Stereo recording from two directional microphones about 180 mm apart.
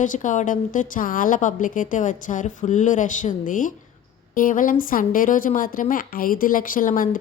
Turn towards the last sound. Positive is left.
turn(degrees=50)  # may be behind; listen again after turning